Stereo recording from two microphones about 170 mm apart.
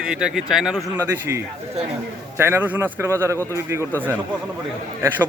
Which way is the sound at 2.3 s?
15° right (ahead or behind).